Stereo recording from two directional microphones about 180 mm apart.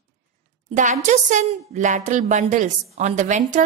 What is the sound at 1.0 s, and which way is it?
A woman's voice, 40° right (ahead or behind).